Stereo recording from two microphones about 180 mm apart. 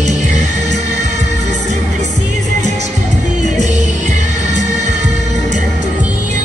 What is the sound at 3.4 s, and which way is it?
Music, 40° right (ahead or behind).